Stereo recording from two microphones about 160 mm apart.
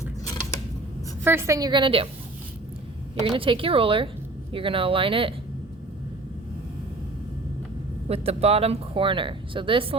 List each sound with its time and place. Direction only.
1.2 s a woman's voice: 15° right (ahead or behind); by 2.0 s 35° right (ahead or behind)
3.2 s speech: 35° right (ahead or behind)
8.0 s speech: 40° right (ahead or behind)